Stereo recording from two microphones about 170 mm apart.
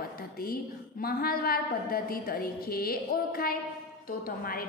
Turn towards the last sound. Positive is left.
turn(degrees=60)  # may be behind; listen again after turning